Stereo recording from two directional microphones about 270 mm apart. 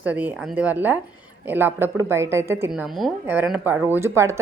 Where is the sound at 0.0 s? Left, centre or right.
Centre.